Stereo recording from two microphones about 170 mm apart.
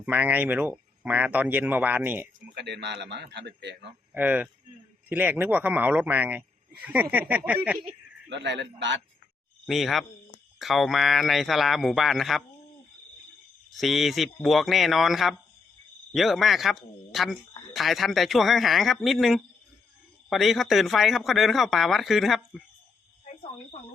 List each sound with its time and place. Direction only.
0.0 s speech: 10° right (ahead or behind)
2.6 s a man's voice: 90° right
4.1 s speech: 10° right (ahead or behind)
8.3 s a man's voice: 90° right
9.6 s speech: centre (ahead or behind)
13.7 s speech: centre (ahead or behind)